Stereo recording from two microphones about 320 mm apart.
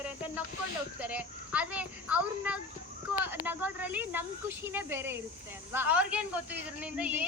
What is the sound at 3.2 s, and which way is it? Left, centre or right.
Speech, centre.